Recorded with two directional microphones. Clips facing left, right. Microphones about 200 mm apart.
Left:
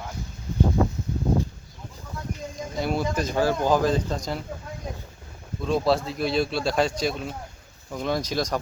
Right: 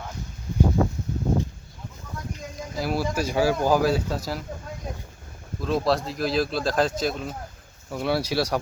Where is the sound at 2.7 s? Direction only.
5° right (ahead or behind).